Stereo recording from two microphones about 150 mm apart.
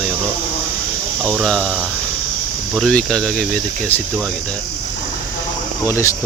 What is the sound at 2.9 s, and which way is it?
Speech, 5° left (ahead or behind).